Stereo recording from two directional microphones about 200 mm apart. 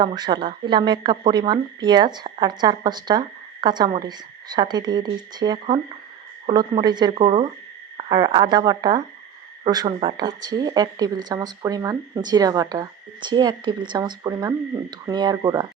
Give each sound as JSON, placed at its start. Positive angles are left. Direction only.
{"t": 0.0, "sound": "a woman's voice", "side_deg": -20}